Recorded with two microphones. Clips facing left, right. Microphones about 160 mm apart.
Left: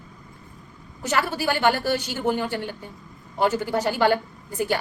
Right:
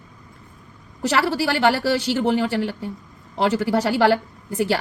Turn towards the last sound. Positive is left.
turn(degrees=-75)  # may be behind; listen again after turning